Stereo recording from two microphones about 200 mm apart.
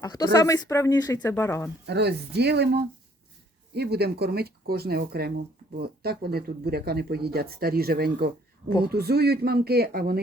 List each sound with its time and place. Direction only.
0.0 s speech: 20° left (ahead or behind)
1.9 s speech: 55° right (ahead or behind)